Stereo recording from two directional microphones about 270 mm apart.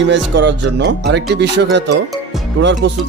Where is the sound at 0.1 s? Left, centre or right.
Right.